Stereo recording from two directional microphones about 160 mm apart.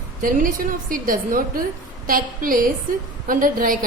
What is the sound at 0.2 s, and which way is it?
A woman's voice, 60° right (ahead or behind).